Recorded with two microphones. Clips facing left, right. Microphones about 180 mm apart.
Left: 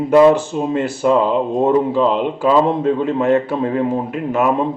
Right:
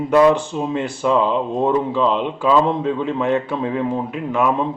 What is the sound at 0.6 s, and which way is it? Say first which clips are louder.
A man's voice: left 3 dB; 45° left (ahead or behind).